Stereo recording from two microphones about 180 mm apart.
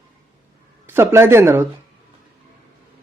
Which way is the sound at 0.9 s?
15° right (ahead or behind).